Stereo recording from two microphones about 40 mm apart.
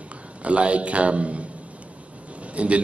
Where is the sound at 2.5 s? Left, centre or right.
Right.